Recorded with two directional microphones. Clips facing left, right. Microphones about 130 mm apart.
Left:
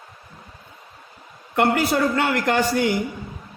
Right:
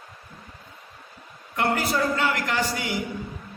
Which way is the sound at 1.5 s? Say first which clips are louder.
Left 5 dB; 65° left (ahead or behind).